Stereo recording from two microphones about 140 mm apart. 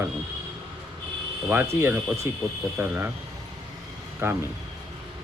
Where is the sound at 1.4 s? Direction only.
15° right (ahead or behind).